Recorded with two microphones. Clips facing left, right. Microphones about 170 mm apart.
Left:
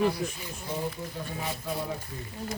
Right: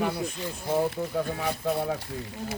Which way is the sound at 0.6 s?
65° right (ahead or behind).